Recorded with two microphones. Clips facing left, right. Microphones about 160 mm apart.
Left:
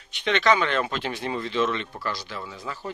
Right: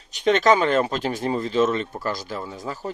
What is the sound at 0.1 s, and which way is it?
Speech, 45° right (ahead or behind).